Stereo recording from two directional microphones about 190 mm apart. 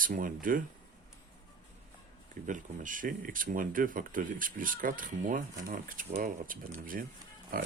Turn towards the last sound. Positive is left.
turn(degrees=-50)  # may be behind; listen again after turning